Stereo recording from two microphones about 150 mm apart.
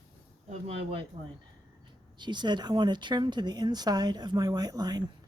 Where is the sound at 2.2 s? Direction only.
30° right (ahead or behind).